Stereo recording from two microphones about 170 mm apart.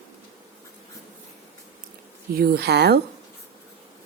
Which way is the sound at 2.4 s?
70° right (ahead or behind).